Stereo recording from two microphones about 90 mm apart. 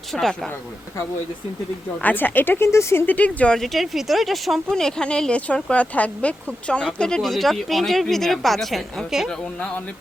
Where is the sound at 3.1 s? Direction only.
15° left (ahead or behind); by 9.3 s 5° right (ahead or behind).